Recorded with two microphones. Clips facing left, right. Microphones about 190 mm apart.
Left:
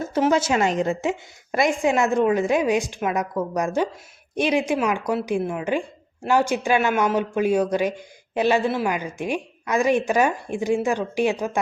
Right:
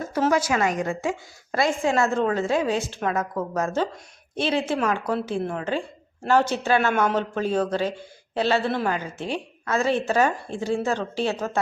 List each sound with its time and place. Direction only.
0.0 s speech: 25° left (ahead or behind)